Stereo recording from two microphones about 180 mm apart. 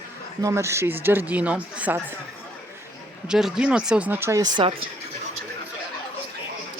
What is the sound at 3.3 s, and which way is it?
Speech, 5° right (ahead or behind).